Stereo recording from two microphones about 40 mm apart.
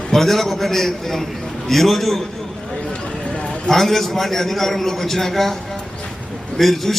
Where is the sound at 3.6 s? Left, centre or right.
Centre.